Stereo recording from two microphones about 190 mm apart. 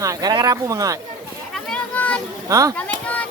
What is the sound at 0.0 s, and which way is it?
Speech, 20° right (ahead or behind).